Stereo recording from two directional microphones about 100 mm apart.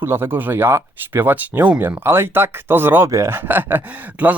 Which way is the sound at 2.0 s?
25° right (ahead or behind).